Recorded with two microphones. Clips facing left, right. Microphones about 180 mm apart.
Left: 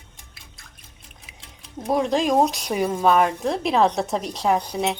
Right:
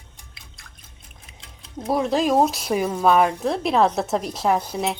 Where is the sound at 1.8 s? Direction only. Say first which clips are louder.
Even; centre (ahead or behind).